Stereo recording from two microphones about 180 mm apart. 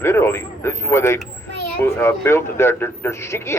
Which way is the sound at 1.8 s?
15° left (ahead or behind).